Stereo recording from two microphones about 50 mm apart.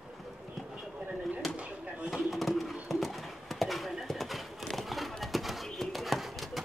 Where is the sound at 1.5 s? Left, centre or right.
Right.